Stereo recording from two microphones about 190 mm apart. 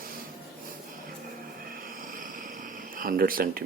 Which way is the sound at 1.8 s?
45° right (ahead or behind).